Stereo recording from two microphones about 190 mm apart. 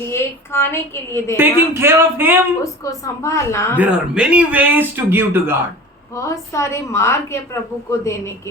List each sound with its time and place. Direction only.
0.1 s a woman's voice: 15° left (ahead or behind)
1.4 s speech: 10° right (ahead or behind)
2.8 s a woman's voice: 15° left (ahead or behind)
3.8 s speech: 5° right (ahead or behind)
6.1 s a woman's voice: 15° left (ahead or behind)